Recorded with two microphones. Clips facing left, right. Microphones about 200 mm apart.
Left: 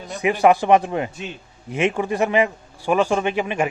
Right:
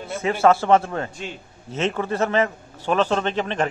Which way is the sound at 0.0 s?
15° left (ahead or behind).